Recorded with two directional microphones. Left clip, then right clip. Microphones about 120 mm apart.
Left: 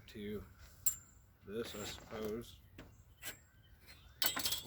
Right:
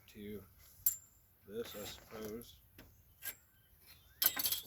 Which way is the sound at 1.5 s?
15° left (ahead or behind).